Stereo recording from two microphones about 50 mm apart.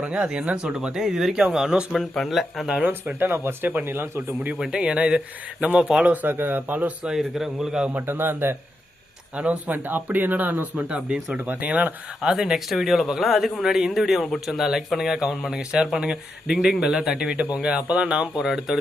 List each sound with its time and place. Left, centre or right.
0.0 s speech: right
1.9 s speech: centre
3.2 s speech: right
4.5 s speech: centre
6.2 s speech: right
6.7 s speech: right
7.2 s speech: centre
7.9 s speech: right
9.3 s speech: right
9.7 s speech: right
10.8 s speech: right
11.4 s speech: right
12.2 s speech: centre
18.4 s speech: centre